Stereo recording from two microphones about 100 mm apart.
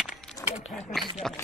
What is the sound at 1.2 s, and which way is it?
Speech, 5° left (ahead or behind).